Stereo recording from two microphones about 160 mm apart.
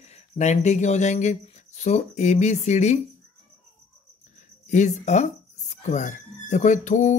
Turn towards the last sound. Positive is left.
turn(degrees=50)  # may be behind; listen again after turning